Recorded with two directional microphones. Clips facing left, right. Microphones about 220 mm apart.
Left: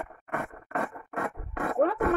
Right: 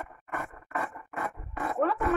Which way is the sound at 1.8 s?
40° left (ahead or behind).